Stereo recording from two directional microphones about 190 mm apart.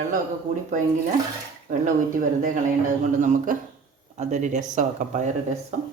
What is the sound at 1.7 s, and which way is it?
Speech, 40° right (ahead or behind).